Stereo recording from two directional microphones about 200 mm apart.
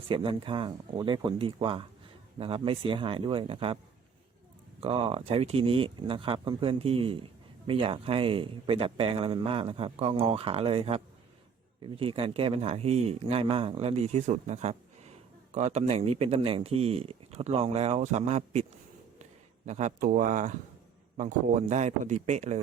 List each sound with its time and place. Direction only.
0.1 s a man's voice: 25° right (ahead or behind)
4.8 s a man's voice: 30° right (ahead or behind)